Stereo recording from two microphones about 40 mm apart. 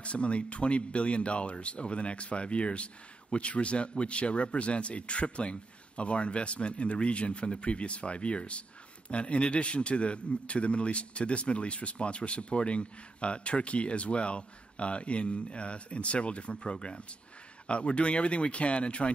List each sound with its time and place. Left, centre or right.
0.0 s a man's voice: left